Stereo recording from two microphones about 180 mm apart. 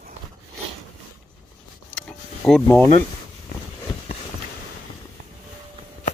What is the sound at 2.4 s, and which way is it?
Speech, 5° left (ahead or behind).